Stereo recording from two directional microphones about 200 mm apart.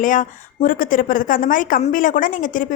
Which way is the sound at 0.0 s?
40° left (ahead or behind).